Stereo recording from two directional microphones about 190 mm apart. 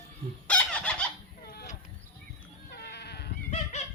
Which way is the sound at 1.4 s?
60° left (ahead or behind).